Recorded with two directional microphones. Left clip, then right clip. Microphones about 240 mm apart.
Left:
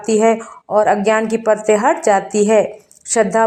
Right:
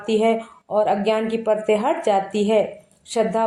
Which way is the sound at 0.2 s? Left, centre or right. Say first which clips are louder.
Left 6 dB; left.